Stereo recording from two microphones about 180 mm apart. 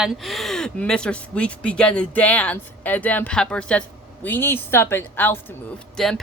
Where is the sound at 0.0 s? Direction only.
Centre (ahead or behind).